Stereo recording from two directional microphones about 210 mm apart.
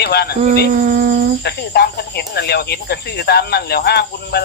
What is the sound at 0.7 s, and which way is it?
Speech, 40° right (ahead or behind).